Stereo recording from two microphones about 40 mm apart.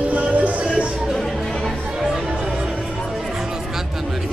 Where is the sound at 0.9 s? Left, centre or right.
Centre.